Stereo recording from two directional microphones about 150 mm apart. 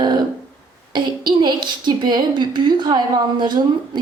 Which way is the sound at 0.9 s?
30° right (ahead or behind).